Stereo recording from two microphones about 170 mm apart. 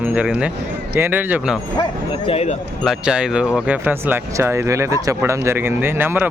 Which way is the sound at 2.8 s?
5° right (ahead or behind).